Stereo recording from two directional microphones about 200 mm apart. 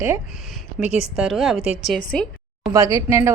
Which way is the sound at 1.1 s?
Centre (ahead or behind).